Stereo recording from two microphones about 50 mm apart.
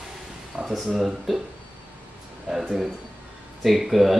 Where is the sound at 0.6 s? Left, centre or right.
Right.